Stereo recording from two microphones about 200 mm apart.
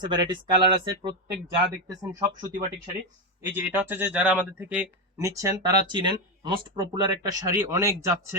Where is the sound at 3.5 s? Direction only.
10° right (ahead or behind).